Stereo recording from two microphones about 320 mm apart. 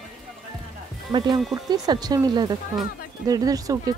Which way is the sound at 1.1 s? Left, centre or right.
Centre.